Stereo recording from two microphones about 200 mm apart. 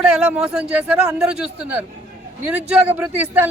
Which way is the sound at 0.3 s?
5° right (ahead or behind).